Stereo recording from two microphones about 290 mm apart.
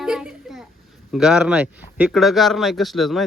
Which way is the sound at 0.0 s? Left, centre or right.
Centre.